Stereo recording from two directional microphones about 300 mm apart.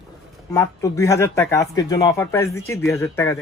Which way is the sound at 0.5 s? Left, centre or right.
Centre.